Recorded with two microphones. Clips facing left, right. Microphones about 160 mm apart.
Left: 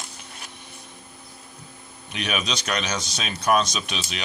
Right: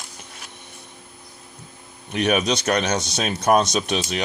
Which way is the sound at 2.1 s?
45° right (ahead or behind).